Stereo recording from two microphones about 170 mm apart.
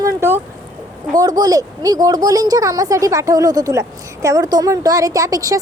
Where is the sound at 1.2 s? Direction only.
20° right (ahead or behind).